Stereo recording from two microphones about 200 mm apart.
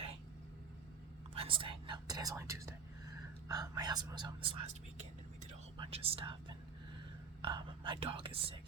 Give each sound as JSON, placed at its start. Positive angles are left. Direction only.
{"t": 1.4, "sound": "speech", "side_deg": -25}
{"t": 5.7, "sound": "speech", "side_deg": -25}
{"t": 7.4, "sound": "speech", "side_deg": -25}